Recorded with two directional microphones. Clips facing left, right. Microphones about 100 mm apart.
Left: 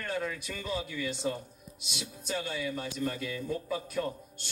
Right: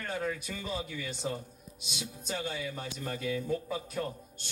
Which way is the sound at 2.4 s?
30° right (ahead or behind).